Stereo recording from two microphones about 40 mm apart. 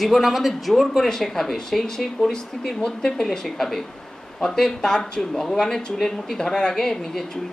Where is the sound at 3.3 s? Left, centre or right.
Centre.